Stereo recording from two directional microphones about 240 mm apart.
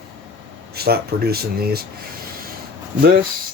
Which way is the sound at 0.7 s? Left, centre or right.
Right.